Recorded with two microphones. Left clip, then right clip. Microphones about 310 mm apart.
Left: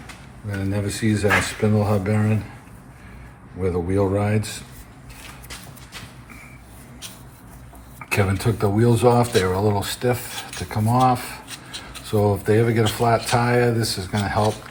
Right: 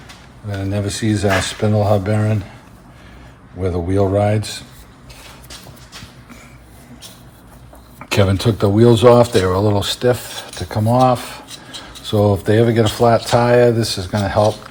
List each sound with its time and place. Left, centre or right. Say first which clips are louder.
0.5 s speech: right 4 dB; right
3.6 s speech: right 4 dB; right
8.1 s speech: right 6 dB; right
11.4 s a sound: right 2 dB; centre
12.0 s speech: right 4 dB; right